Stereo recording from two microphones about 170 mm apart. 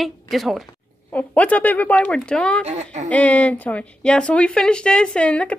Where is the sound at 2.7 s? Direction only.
45° right (ahead or behind).